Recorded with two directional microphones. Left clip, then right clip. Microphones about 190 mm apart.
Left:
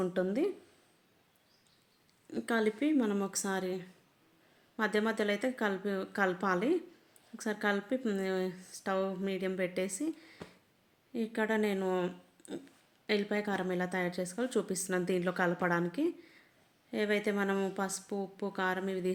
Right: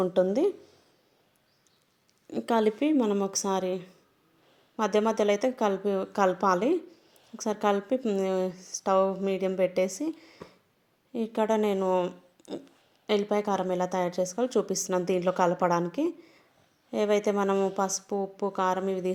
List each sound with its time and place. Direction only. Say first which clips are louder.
0.0 s speech: right 8 dB; 20° right (ahead or behind)
2.3 s a woman's voice: right 7 dB; 20° right (ahead or behind)
4.9 s a woman's voice: right 9 dB; 15° right (ahead or behind)